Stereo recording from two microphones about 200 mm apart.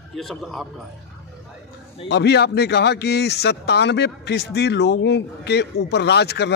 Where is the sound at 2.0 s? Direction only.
55° left (ahead or behind).